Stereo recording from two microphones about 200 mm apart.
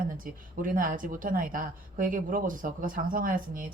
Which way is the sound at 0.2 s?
45° right (ahead or behind).